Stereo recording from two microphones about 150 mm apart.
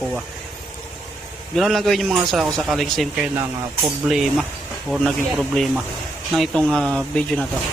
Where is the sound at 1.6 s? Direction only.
Centre (ahead or behind).